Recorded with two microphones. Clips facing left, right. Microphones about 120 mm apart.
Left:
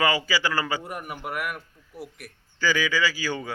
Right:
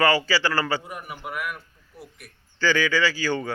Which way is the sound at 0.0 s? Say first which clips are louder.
Right 3 dB; 15° left (ahead or behind).